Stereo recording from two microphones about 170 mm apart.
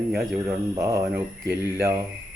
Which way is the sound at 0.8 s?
15° right (ahead or behind).